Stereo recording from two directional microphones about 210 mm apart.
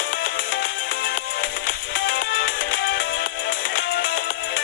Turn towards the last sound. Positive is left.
turn(degrees=40)  # may be behind; listen again after turning